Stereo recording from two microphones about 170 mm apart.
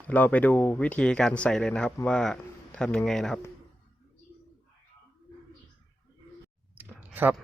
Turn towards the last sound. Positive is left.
turn(degrees=-10)  # may be behind; listen again after turning